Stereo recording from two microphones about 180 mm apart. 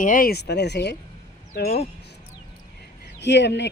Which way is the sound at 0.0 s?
50° left (ahead or behind).